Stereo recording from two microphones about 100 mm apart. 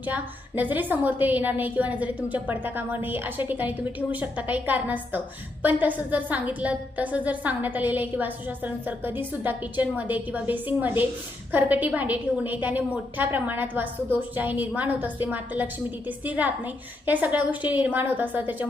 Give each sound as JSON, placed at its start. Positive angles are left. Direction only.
{"t": 0.0, "sound": "a woman's voice", "side_deg": -15}